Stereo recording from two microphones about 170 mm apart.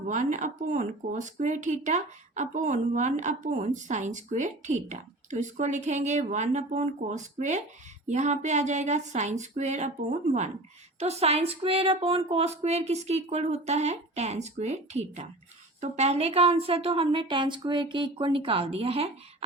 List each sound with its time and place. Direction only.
0.1 s speech: 45° right (ahead or behind)